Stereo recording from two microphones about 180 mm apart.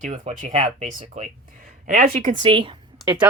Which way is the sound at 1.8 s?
45° right (ahead or behind).